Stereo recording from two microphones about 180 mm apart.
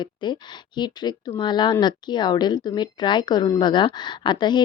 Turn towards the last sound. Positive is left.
turn(degrees=25)  # may be behind; listen again after turning